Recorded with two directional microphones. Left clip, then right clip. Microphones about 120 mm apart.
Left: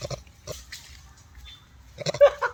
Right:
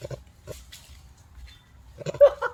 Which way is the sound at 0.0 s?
65° left (ahead or behind).